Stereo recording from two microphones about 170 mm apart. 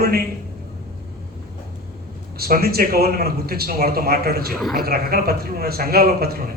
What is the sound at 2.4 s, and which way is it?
Speech, 65° right (ahead or behind).